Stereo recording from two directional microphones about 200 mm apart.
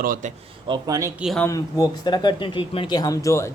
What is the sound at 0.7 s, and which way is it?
Speech, 20° right (ahead or behind).